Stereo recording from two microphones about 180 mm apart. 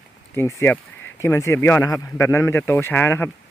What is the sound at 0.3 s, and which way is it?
Speech, 15° left (ahead or behind).